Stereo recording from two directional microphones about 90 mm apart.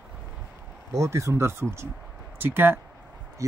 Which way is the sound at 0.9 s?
35° right (ahead or behind).